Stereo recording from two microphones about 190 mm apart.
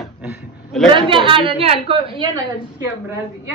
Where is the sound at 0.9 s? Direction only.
25° right (ahead or behind).